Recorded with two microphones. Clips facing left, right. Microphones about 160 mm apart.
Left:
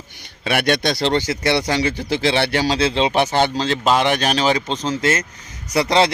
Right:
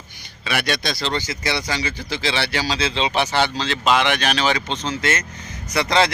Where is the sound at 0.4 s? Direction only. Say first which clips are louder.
Left 5 dB; 55° left (ahead or behind).